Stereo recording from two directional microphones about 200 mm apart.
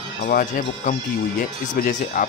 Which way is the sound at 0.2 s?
40° left (ahead or behind).